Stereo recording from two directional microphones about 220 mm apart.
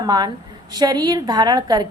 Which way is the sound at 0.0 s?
20° right (ahead or behind).